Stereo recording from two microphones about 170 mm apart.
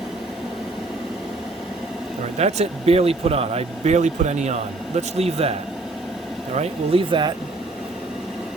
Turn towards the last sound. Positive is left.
turn(degrees=-25)  # may be behind; listen again after turning